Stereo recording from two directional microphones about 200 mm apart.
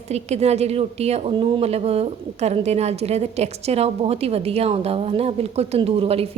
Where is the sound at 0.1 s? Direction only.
35° right (ahead or behind).